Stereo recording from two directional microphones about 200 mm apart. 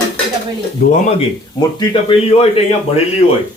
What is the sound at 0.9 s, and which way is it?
Speech, 30° left (ahead or behind).